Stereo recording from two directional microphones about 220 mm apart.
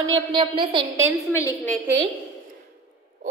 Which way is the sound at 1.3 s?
10° left (ahead or behind).